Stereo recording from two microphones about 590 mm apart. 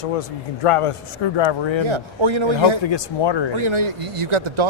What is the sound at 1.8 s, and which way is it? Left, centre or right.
Speech, right.